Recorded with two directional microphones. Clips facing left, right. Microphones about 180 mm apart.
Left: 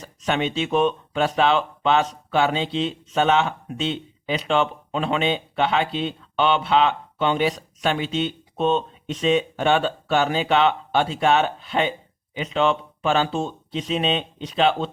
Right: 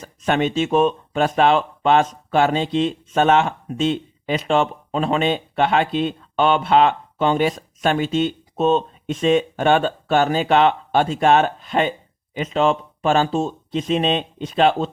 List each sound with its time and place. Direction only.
0.0 s speech: 50° right (ahead or behind)